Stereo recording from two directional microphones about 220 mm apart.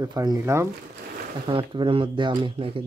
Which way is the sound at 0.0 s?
15° right (ahead or behind).